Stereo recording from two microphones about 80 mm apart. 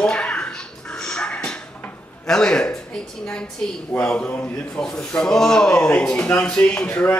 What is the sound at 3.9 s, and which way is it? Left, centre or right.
Speech, centre.